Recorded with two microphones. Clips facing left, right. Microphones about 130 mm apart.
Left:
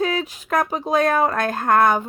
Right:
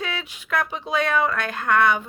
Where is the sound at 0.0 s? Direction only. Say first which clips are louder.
Left 9 dB; 40° left (ahead or behind).